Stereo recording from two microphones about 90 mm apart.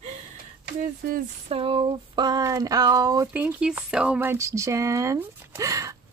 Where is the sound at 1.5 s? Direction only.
80° right; by 2.4 s 55° right (ahead or behind).